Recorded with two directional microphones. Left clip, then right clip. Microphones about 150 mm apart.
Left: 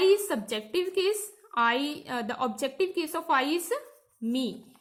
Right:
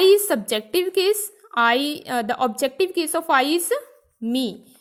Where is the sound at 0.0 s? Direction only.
50° right (ahead or behind).